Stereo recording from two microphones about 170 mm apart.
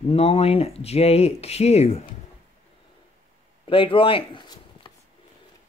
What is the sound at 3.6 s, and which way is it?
Speech, 30° left (ahead or behind).